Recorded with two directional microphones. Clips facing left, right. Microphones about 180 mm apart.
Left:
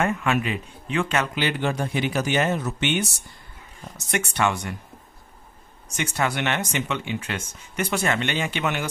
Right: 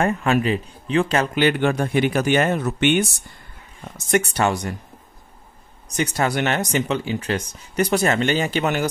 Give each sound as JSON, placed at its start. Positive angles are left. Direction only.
{"t": 0.0, "sound": "speech", "side_deg": -35}
{"t": 1.3, "sound": "speech", "side_deg": -55}
{"t": 4.1, "sound": "speech", "side_deg": -35}
{"t": 5.9, "sound": "speech", "side_deg": -40}